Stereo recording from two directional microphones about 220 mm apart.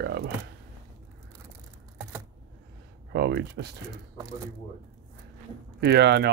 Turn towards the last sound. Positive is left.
turn(degrees=-50)  # may be behind; listen again after turning